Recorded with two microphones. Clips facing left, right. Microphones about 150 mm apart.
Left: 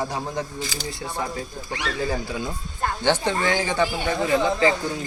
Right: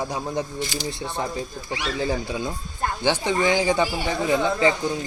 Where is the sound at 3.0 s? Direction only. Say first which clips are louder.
Right 1 dB; 10° right (ahead or behind).